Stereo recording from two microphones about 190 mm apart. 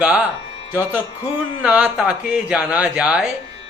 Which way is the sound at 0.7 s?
10° right (ahead or behind).